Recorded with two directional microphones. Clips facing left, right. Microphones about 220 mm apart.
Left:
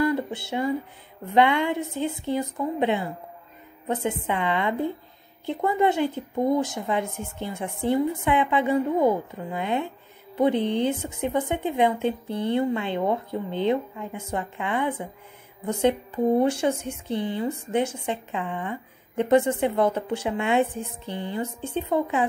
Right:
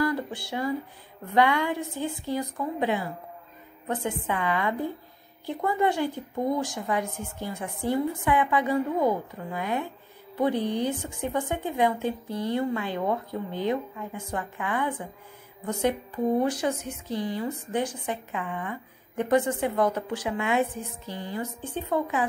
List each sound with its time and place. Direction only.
0.0 s a sound: 25° left (ahead or behind)
1.3 s a woman's voice: 25° left (ahead or behind)
16.3 s a woman's voice: 25° left (ahead or behind)